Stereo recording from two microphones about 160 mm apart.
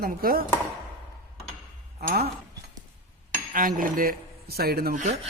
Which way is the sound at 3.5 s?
60° right (ahead or behind).